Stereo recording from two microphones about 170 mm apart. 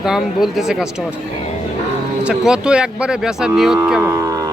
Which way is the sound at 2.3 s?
5° right (ahead or behind).